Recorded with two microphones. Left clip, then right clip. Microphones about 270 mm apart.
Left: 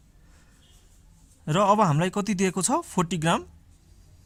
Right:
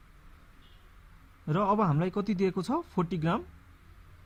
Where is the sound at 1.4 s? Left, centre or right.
Left.